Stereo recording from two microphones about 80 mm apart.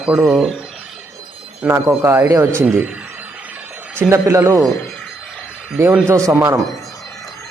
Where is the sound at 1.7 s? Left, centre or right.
Right.